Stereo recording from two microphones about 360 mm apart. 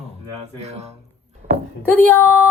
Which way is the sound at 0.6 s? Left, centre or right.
Centre.